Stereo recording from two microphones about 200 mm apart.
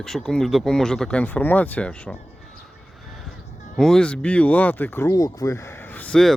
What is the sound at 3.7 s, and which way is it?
Speech, centre (ahead or behind).